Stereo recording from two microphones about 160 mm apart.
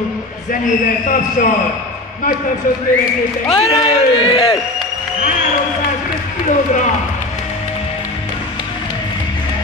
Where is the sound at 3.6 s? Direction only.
35° left (ahead or behind).